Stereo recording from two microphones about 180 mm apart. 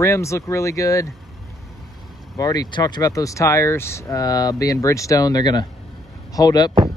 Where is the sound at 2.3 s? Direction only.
20° left (ahead or behind).